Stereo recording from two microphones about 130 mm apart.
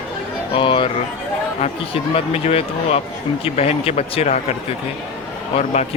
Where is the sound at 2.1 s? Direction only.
50° left (ahead or behind).